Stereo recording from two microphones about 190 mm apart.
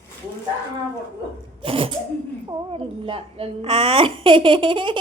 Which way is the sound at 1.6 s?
30° right (ahead or behind).